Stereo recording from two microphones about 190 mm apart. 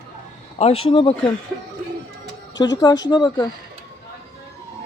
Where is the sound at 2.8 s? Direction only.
20° left (ahead or behind).